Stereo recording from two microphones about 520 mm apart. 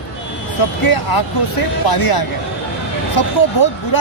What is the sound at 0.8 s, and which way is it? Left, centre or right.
Speech, left.